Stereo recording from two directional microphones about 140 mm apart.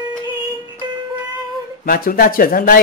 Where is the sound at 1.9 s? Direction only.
90° left.